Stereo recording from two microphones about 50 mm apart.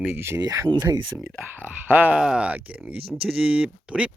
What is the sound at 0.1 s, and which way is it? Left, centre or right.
Speech, right.